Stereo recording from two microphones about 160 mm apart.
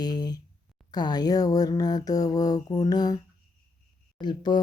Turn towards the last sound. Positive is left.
turn(degrees=25)  # may be behind; listen again after turning